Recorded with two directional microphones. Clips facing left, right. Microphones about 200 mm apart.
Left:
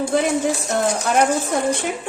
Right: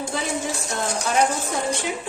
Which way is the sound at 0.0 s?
55° left (ahead or behind).